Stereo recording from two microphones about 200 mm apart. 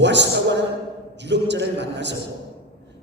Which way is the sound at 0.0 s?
60° right (ahead or behind).